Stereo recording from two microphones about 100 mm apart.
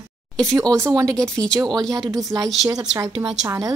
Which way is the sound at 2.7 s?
35° right (ahead or behind).